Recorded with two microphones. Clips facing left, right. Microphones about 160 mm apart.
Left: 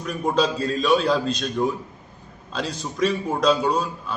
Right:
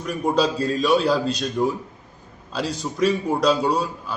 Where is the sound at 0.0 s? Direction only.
5° right (ahead or behind).